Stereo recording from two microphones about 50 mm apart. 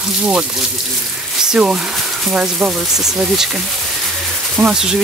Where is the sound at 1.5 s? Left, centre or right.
Centre.